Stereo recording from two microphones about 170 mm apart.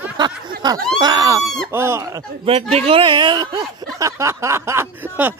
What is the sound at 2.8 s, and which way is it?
Speech, 35° right (ahead or behind).